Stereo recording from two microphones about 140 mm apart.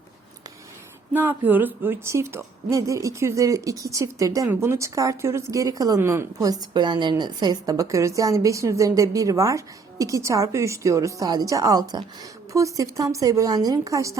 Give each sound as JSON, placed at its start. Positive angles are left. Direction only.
{"t": 1.1, "sound": "a woman's voice", "side_deg": -15}